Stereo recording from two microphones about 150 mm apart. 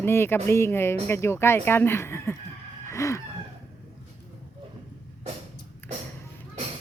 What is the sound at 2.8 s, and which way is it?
Chicken, 20° left (ahead or behind).